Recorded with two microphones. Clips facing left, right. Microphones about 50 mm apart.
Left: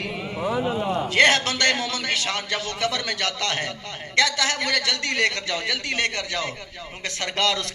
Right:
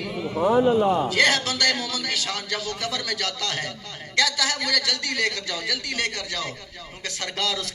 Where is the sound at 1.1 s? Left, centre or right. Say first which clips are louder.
Left 3 dB; left.